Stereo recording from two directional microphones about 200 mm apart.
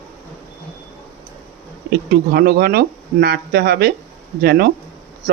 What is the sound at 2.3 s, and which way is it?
Speech, 50° right (ahead or behind).